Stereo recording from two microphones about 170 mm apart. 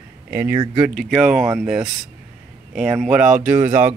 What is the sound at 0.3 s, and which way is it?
Speech, 10° right (ahead or behind).